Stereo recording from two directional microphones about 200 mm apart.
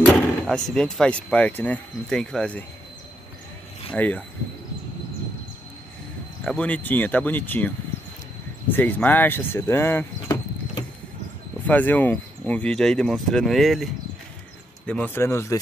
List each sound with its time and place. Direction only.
0.1 s speech: 5° left (ahead or behind)
3.9 s speech: 5° left (ahead or behind)
6.4 s speech: 5° left (ahead or behind)
11.6 s speech: 10° left (ahead or behind)
14.9 s speech: 10° left (ahead or behind)